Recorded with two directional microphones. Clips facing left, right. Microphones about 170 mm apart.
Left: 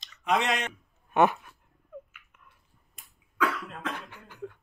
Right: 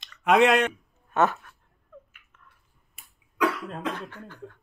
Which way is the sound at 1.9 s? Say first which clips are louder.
Left 5 dB; 10° left (ahead or behind).